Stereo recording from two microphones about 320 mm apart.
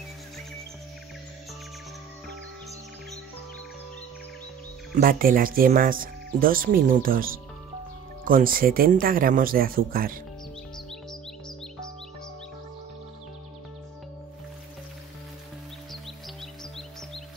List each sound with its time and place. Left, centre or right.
4.9 s speech: right